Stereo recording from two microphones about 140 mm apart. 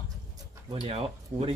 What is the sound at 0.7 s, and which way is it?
Speech, 45° right (ahead or behind).